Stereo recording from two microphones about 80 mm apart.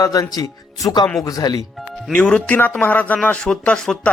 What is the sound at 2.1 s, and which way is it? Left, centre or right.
Speech, centre.